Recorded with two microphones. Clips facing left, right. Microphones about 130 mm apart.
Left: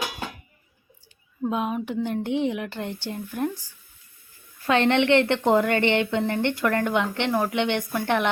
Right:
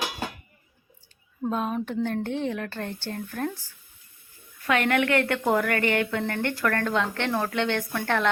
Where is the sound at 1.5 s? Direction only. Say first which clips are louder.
Left 1 dB; 10° left (ahead or behind).